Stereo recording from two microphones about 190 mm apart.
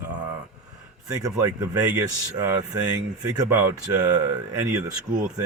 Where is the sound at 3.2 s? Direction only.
15° right (ahead or behind).